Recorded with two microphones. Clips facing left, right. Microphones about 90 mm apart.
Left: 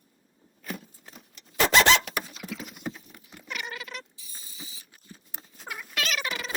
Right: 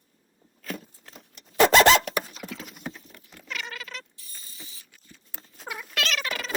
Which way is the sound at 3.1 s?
15° left (ahead or behind).